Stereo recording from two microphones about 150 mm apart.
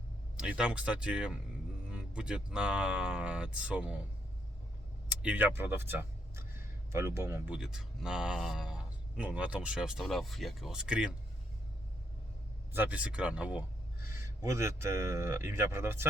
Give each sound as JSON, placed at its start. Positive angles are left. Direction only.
{"t": 0.3, "sound": "speech", "side_deg": -5}
{"t": 5.0, "sound": "speech", "side_deg": -10}
{"t": 12.7, "sound": "speech", "side_deg": -10}